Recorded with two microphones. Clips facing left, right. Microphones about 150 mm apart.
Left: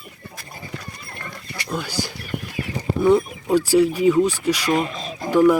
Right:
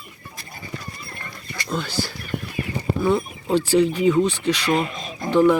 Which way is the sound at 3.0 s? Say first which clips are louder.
Left 6 dB; 15° left (ahead or behind).